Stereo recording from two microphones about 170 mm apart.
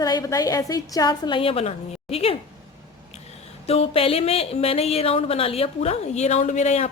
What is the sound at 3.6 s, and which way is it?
Speech, 35° left (ahead or behind).